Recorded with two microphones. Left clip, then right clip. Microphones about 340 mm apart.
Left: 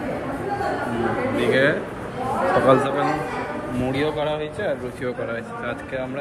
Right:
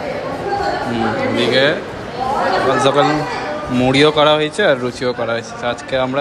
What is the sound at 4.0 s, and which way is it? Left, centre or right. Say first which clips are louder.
Speech: right 13 dB; right.